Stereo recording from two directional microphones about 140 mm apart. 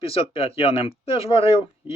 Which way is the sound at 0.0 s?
40° left (ahead or behind).